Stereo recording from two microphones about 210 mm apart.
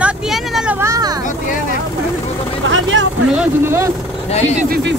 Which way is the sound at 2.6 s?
65° right (ahead or behind).